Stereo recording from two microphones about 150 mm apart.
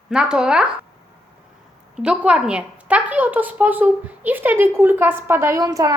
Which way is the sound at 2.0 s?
5° right (ahead or behind).